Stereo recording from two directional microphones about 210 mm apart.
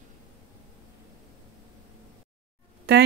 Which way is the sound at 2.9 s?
50° right (ahead or behind).